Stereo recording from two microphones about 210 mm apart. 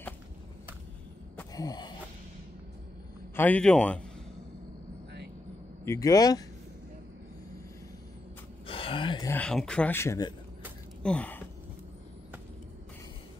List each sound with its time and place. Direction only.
1.5 s a sound: 20° left (ahead or behind)
3.3 s speech: 5° left (ahead or behind)
5.9 s speech: 15° left (ahead or behind)
8.6 s gasp: 25° left (ahead or behind)
9.3 s speech: 5° left (ahead or behind)
11.0 s a sound: 5° left (ahead or behind)